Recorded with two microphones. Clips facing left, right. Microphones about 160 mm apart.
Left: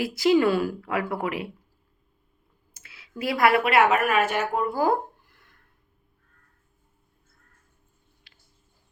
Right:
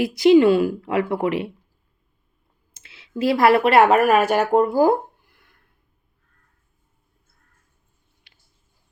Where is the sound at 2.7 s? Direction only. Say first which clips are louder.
Right 8 dB; 25° right (ahead or behind).